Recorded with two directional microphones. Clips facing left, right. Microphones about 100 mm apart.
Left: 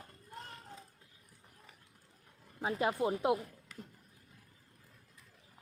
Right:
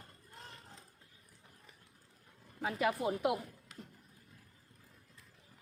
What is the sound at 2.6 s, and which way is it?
Speech, 25° left (ahead or behind).